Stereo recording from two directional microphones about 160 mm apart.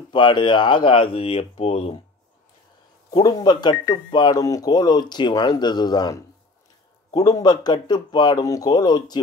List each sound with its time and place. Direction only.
0.1 s speech: 30° left (ahead or behind)
3.1 s speech: 25° left (ahead or behind)